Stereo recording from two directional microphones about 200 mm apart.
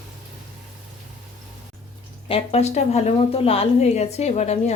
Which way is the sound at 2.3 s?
30° left (ahead or behind).